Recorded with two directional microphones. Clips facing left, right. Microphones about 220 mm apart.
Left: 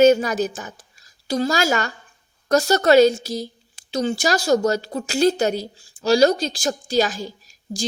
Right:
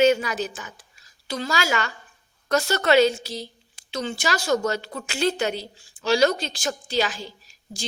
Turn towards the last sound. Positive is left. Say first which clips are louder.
# left 9 dB
turn(degrees=40)  # may be behind; listen again after turning